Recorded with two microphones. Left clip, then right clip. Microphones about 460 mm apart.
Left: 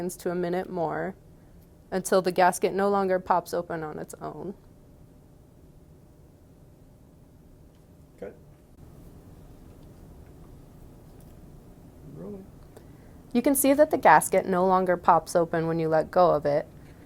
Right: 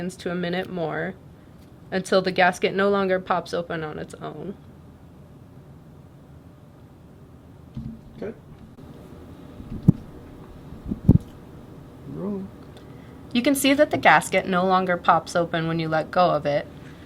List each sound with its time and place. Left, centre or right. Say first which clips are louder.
0.0 s speech: right 1 dB; left
13.2 s speech: right 2 dB; left